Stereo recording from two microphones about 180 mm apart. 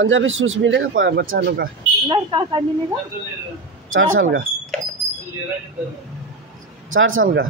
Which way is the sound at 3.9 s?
90° right.